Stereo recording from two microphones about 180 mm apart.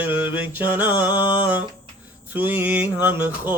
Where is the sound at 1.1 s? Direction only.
25° left (ahead or behind).